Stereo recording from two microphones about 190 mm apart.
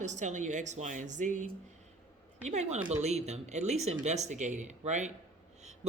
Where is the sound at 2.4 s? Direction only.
35° right (ahead or behind).